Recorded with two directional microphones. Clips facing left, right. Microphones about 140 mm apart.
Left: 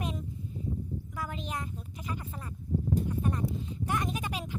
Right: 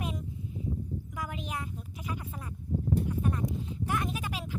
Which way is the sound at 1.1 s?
10° right (ahead or behind).